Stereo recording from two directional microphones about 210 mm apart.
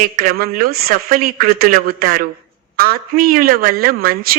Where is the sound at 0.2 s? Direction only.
45° right (ahead or behind).